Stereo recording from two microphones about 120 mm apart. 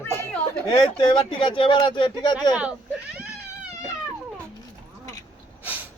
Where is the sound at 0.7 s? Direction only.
50° left (ahead or behind).